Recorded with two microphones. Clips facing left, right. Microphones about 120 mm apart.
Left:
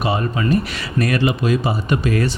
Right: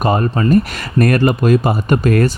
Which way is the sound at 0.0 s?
45° right (ahead or behind).